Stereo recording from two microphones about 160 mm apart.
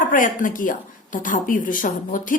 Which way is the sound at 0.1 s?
55° left (ahead or behind).